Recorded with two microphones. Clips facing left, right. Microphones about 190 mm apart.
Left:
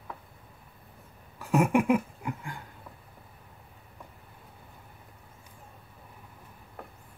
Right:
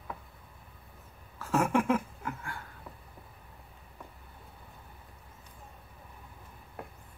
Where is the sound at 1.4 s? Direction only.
15° left (ahead or behind).